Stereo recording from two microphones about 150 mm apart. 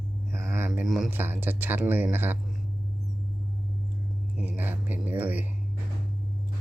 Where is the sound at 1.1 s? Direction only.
15° right (ahead or behind).